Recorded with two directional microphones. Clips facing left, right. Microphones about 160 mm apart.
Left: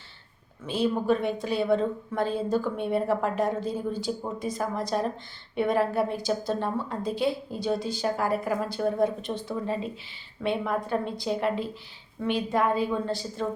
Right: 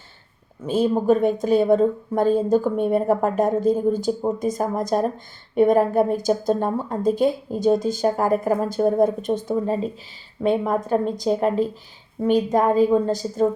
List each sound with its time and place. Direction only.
0.6 s a woman's voice: 40° right (ahead or behind)